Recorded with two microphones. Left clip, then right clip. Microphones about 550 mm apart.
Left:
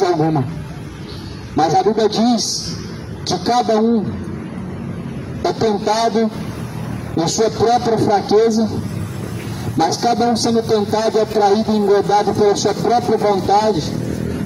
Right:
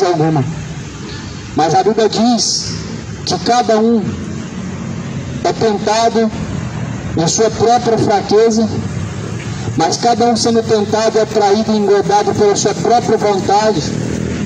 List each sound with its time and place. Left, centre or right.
0.0 s a sound: left
1.6 s speech: left
5.4 s speech: left
9.8 s speech: left